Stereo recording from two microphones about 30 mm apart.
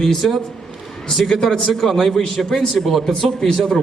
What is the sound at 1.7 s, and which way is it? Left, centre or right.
A man's voice, centre.